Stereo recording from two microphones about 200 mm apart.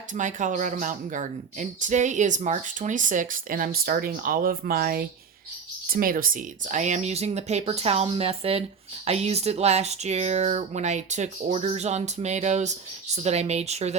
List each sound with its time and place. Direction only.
0.1 s speech: 40° right (ahead or behind)